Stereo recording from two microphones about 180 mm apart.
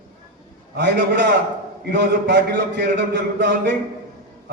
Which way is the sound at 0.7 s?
70° right (ahead or behind).